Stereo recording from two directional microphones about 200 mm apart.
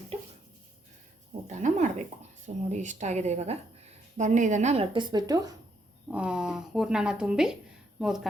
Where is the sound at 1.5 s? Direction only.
35° right (ahead or behind); by 5.6 s 20° right (ahead or behind).